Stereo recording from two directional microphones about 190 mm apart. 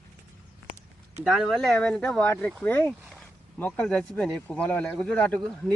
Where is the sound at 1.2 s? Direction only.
Centre (ahead or behind).